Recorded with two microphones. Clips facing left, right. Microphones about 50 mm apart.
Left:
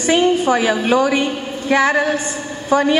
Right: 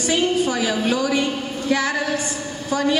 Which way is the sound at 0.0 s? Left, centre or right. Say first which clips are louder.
Left 5 dB; left.